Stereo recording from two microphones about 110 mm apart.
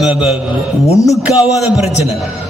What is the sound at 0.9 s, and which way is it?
Music, 30° left (ahead or behind).